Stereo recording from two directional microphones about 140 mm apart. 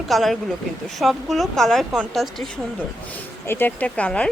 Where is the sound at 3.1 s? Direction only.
15° left (ahead or behind).